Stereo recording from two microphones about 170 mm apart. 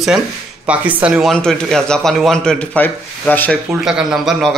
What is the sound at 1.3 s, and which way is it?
A man's voice, 5° left (ahead or behind).